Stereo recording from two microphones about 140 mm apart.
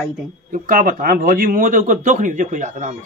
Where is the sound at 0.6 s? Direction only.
75° right (ahead or behind); by 3.0 s 60° right (ahead or behind).